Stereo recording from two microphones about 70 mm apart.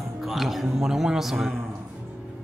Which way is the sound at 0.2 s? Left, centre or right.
Centre.